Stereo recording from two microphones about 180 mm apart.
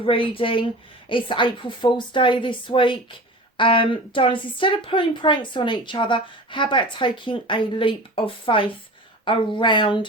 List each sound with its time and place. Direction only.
0.0 s a woman's voice: 30° left (ahead or behind)